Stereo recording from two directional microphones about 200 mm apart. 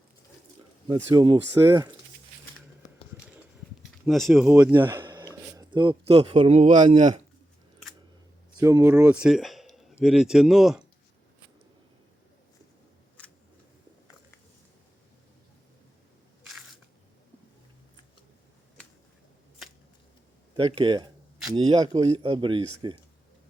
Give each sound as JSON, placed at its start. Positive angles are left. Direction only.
{"t": 0.9, "sound": "speech", "side_deg": -20}
{"t": 4.0, "sound": "speech", "side_deg": 0}
{"t": 4.4, "sound": "speech", "side_deg": -15}
{"t": 8.6, "sound": "speech", "side_deg": -15}
{"t": 18.8, "sound": "finger snapping", "side_deg": 5}
{"t": 20.6, "sound": "speech", "side_deg": -25}